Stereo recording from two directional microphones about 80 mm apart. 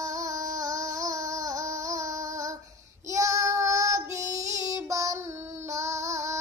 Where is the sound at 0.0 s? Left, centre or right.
Right.